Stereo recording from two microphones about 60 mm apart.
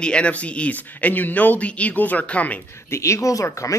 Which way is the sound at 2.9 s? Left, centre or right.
Left.